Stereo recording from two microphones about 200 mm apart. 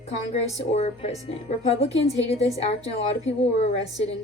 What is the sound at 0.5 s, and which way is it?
Speech, 30° left (ahead or behind).